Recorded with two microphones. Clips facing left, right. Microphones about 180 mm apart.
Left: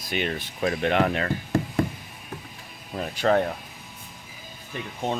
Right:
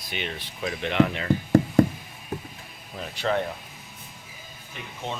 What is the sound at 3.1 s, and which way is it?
Speech, 45° left (ahead or behind).